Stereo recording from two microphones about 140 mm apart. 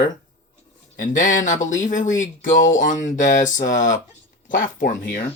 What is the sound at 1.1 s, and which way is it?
Speech, 65° left (ahead or behind).